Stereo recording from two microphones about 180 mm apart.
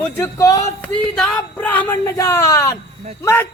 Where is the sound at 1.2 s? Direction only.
5° left (ahead or behind).